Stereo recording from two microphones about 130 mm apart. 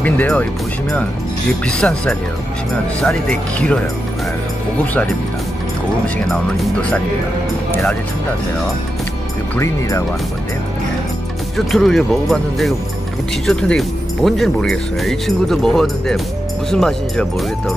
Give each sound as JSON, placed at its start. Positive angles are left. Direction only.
{"t": 0.0, "sound": "speech", "side_deg": 10}
{"t": 1.7, "sound": "speech", "side_deg": 5}
{"t": 6.1, "sound": "speech", "side_deg": 0}
{"t": 9.6, "sound": "speech", "side_deg": 25}
{"t": 11.5, "sound": "speech", "side_deg": 0}